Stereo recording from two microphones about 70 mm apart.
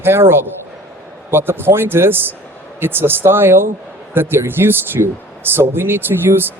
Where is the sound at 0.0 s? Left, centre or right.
Right.